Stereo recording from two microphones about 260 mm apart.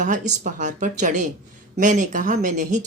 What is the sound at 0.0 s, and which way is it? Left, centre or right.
A woman's voice, right.